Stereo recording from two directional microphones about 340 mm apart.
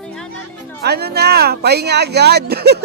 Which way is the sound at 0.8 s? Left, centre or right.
Right.